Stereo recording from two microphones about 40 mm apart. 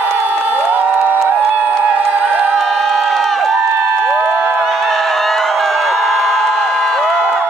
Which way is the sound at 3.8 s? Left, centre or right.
Centre.